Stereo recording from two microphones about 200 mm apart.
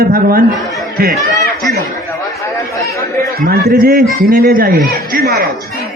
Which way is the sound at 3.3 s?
45° right (ahead or behind).